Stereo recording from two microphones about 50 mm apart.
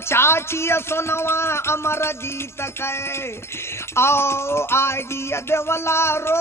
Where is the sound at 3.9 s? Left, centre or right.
Left.